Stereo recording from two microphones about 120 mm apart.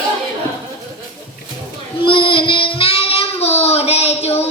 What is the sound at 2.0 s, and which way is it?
Child singing, 45° left (ahead or behind).